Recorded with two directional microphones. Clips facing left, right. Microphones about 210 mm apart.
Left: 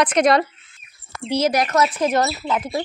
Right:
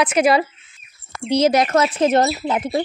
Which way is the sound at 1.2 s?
20° right (ahead or behind).